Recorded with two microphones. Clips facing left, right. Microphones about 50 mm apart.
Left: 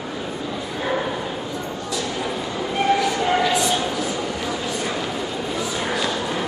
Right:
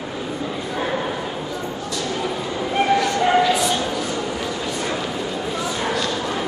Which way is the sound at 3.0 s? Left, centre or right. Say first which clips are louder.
Right 2 dB; centre.